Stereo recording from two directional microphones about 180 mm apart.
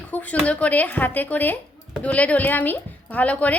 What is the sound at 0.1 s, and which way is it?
Speech, 10° left (ahead or behind).